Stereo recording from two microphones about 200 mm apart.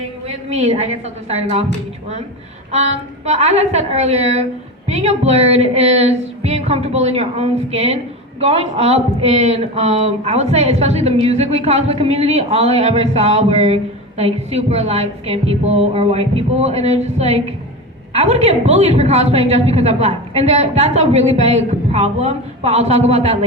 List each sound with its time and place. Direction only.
0.3 s a woman's voice: 30° right (ahead or behind)
2.7 s a woman's voice: 35° right (ahead or behind)